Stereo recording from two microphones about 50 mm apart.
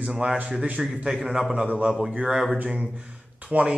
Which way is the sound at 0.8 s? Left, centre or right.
Centre.